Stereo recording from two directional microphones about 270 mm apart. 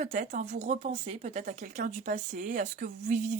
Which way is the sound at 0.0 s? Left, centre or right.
Right.